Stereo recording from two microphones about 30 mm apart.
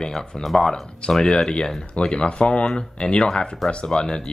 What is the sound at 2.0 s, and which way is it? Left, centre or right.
Speech, left.